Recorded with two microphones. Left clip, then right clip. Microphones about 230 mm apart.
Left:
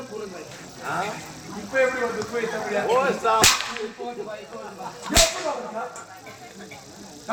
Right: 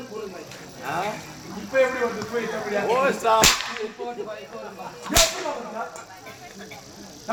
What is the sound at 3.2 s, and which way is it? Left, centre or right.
Whip, right.